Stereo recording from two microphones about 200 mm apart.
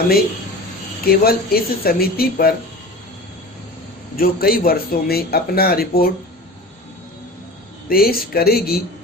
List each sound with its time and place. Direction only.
1.0 s speech: 50° left (ahead or behind)
4.2 s speech: 45° left (ahead or behind)
7.9 s speech: 50° left (ahead or behind)